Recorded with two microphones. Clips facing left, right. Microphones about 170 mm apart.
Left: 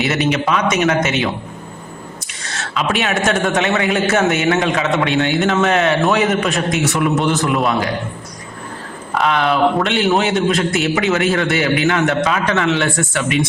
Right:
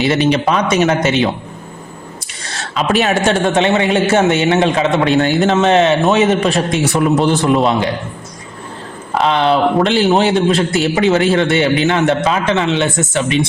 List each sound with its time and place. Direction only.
0.0 s a man's voice: 30° right (ahead or behind)
2.6 s a man's voice: 35° right (ahead or behind)
5.5 s a man's voice: 25° right (ahead or behind)
9.1 s a man's voice: 30° right (ahead or behind)